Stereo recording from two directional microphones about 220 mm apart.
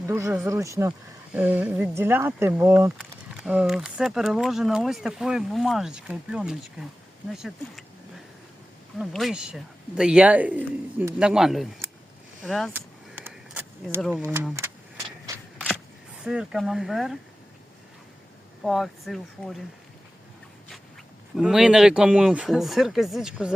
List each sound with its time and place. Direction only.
0.1 s speech: 15° right (ahead or behind)
9.0 s speech: centre (ahead or behind)
12.4 s a sound: centre (ahead or behind)
14.0 s speech: centre (ahead or behind)
15.3 s a sound: 15° right (ahead or behind)
16.2 s speech: 5° right (ahead or behind)
18.6 s speech: centre (ahead or behind)
21.3 s speech: 5° right (ahead or behind)